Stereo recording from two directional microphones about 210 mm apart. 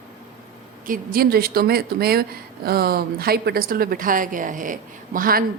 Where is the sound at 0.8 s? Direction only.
40° right (ahead or behind).